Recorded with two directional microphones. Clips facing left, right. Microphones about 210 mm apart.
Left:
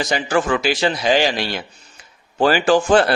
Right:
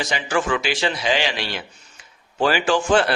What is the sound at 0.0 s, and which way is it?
A man's voice, 40° left (ahead or behind).